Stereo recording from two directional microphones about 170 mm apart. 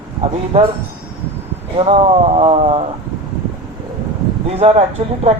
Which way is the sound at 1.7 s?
35° right (ahead or behind).